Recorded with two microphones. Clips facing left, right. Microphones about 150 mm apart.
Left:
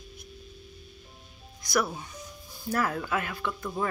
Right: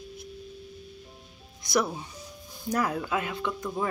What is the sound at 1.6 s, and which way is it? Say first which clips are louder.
Speech: right 1 dB; 20° right (ahead or behind).